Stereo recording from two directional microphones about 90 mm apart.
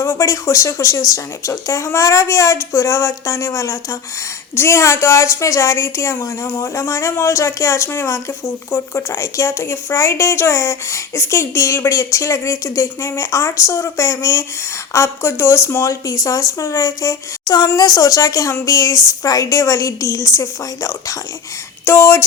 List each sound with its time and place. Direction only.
0.0 s a woman's voice: 35° left (ahead or behind)